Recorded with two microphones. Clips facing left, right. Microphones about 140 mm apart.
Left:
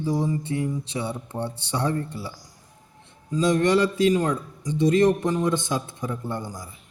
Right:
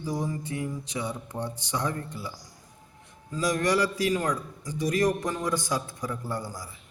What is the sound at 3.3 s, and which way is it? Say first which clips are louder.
A man's voice: left 5 dB; 25° left (ahead or behind).